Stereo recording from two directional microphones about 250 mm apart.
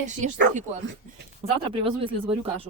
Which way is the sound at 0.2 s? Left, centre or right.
Right.